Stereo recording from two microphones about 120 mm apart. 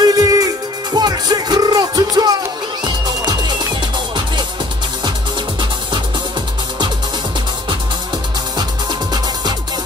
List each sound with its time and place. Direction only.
0.0 s music: 30° right (ahead or behind)
9.1 s music: 35° right (ahead or behind)